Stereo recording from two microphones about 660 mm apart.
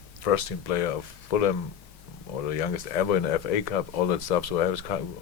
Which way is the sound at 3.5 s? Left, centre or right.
Left.